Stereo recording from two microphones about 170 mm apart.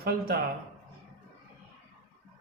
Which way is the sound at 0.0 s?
60° right (ahead or behind).